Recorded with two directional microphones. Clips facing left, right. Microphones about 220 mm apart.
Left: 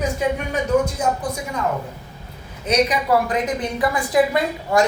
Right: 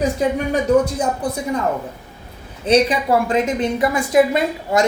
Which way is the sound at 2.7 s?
30° right (ahead or behind).